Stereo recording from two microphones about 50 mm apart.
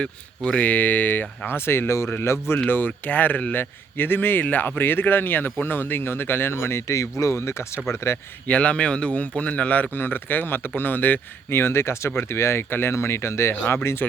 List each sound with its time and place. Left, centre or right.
0.0 s speech: centre
0.6 s speech: left
2.6 s speech: left
3.6 s speech: left
7.9 s speech: left
8.4 s a man's voice: left
9.9 s speech: left
11.5 s speech: left